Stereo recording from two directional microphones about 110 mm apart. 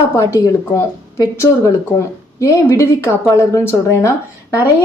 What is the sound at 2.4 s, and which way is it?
A woman's voice, 25° left (ahead or behind).